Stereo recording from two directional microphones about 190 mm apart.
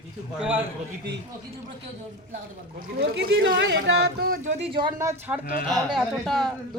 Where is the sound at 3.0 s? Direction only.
60° right (ahead or behind).